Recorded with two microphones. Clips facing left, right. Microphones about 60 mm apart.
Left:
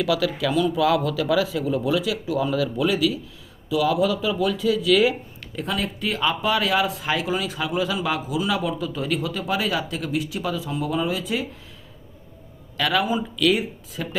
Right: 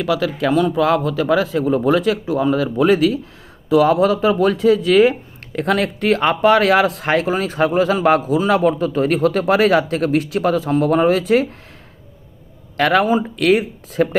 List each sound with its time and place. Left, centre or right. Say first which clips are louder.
0.0 s speech: right 3 dB; right
0.3 s speech: right 5 dB; right
5.5 s speech: right 9 dB; right
12.7 s speech: right 7 dB; right